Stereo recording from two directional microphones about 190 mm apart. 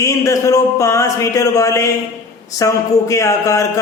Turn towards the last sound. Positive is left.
turn(degrees=15)  # may be behind; listen again after turning